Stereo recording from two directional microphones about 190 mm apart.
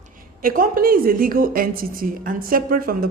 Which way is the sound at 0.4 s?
45° right (ahead or behind).